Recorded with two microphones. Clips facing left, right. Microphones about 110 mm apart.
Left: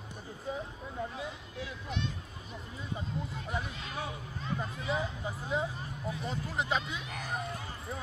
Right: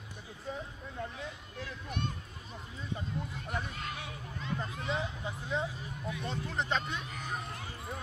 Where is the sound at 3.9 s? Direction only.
35° left (ahead or behind).